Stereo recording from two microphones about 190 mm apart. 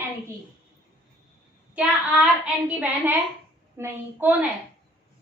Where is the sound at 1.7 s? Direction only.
5° right (ahead or behind).